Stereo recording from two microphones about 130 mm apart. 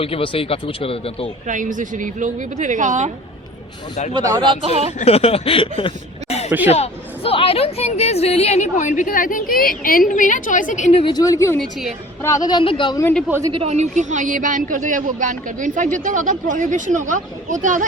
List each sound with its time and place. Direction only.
0.0 s speech: 45° left (ahead or behind)
1.5 s a woman's voice: 80° right
4.1 s speech: 30° right (ahead or behind)
4.9 s a woman's voice: 50° left (ahead or behind); by 10.9 s 80° left
11.0 s a woman's voice: 30° left (ahead or behind)
13.5 s speech: 50° right (ahead or behind); by 17.8 s 80° right